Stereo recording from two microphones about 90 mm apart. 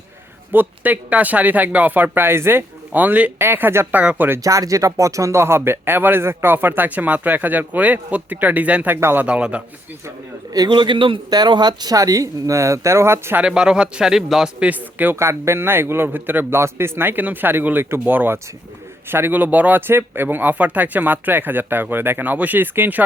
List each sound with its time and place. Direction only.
0.5 s speech: 20° right (ahead or behind)
4.0 s a man's voice: 15° right (ahead or behind)
4.4 s speech: 40° right (ahead or behind); by 9.0 s 15° right (ahead or behind)
9.0 s speech: 30° right (ahead or behind)
9.2 s a man's voice: 15° right (ahead or behind)
10.7 s a man's voice: 65° right (ahead or behind)
11.3 s speech: 55° right (ahead or behind); by 13.4 s 30° right (ahead or behind)
13.4 s a man's voice: 10° right (ahead or behind)
15.2 s speech: 30° right (ahead or behind)